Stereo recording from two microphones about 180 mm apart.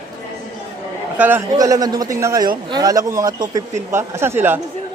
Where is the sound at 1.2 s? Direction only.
15° right (ahead or behind).